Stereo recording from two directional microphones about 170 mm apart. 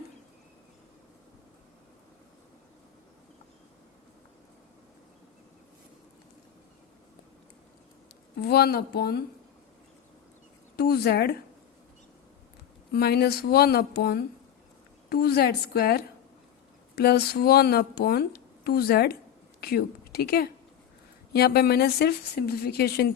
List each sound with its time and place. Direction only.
8.4 s speech: 70° left (ahead or behind)
10.8 s speech: 70° left (ahead or behind)
12.9 s a woman's voice: 70° left (ahead or behind)